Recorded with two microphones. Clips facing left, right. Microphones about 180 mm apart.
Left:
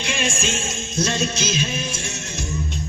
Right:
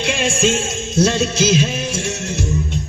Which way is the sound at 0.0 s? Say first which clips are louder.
Right 7 dB; 75° right (ahead or behind).